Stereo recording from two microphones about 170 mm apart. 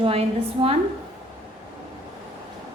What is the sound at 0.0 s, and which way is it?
Speech, 35° right (ahead or behind).